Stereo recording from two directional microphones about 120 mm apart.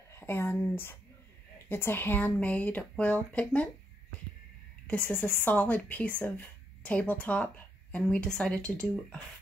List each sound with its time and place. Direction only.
0.1 s a sound: 20° left (ahead or behind)
1.7 s speech: 20° left (ahead or behind)
4.8 s speech: 15° left (ahead or behind)